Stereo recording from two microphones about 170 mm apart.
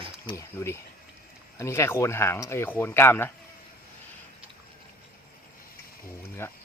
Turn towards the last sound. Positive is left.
turn(degrees=15)  # may be behind; listen again after turning